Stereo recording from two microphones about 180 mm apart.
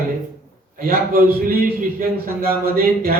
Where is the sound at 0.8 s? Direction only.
55° right (ahead or behind).